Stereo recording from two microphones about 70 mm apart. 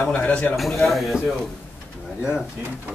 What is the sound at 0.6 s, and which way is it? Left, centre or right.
Speech, centre.